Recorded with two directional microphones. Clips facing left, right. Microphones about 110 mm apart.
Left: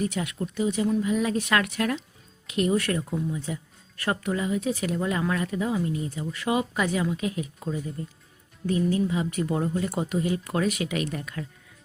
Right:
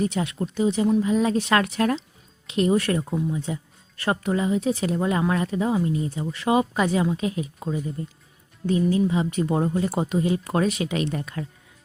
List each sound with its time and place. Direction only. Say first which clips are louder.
0.0 s speech: right 3 dB; 30° right (ahead or behind)